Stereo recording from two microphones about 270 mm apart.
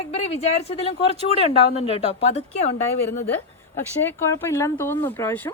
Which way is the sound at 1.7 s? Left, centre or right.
Left.